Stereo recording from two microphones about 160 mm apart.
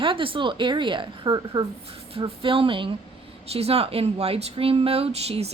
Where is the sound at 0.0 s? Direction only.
30° right (ahead or behind).